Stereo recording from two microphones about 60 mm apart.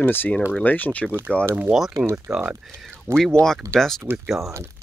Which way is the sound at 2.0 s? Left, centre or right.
Centre.